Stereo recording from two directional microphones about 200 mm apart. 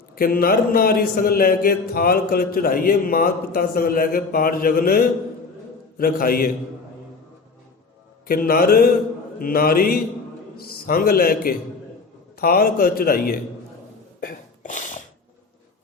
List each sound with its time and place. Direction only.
0.2 s speech: 50° left (ahead or behind)
8.3 s speech: 45° left (ahead or behind)
14.2 s a sound: 40° left (ahead or behind)